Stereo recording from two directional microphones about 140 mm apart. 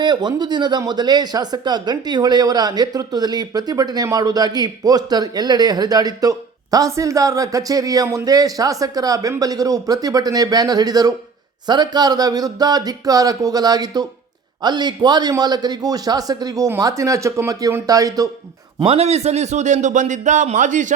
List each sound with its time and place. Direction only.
0.0 s speech: 30° right (ahead or behind)
18.9 s a man's voice: 50° right (ahead or behind); by 20.8 s 65° right (ahead or behind)